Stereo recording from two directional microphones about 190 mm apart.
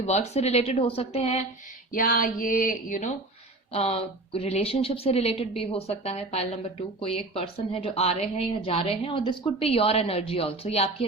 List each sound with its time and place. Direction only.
0.0 s a woman's voice: 35° left (ahead or behind)
1.9 s a sound: 45° left (ahead or behind)
3.7 s a woman's voice: 30° left (ahead or behind)